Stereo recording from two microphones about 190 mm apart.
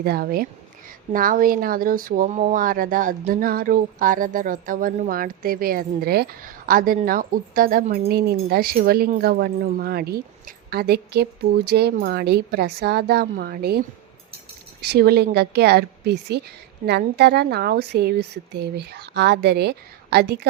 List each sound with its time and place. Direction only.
0.0 s a woman's voice: 55° right (ahead or behind)